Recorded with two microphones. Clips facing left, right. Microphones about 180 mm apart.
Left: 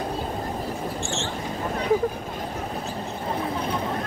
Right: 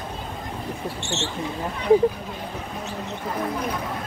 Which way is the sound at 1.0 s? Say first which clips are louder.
Even; 70° right (ahead or behind).